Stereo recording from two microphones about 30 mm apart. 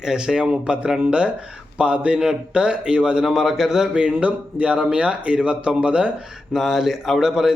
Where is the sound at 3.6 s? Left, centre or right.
Centre.